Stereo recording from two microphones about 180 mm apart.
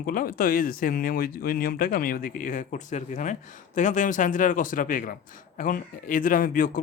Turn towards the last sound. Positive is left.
turn(degrees=50)  # may be behind; listen again after turning